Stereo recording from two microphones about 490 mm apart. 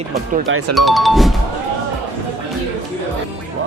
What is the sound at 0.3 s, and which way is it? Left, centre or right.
Speech, right.